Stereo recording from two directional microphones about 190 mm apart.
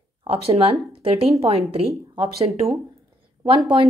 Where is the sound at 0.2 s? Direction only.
30° right (ahead or behind).